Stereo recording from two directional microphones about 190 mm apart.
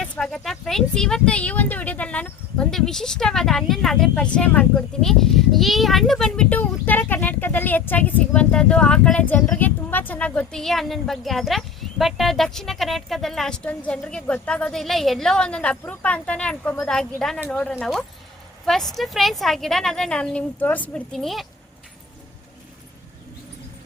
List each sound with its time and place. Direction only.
0.0 s speech: 5° left (ahead or behind)